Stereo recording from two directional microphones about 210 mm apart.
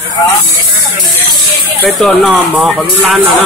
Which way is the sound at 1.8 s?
Centre (ahead or behind).